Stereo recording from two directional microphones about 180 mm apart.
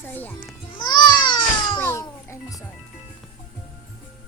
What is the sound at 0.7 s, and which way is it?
Babbling, 25° left (ahead or behind).